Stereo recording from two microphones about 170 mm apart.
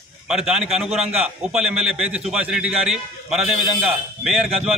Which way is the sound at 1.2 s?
5° right (ahead or behind).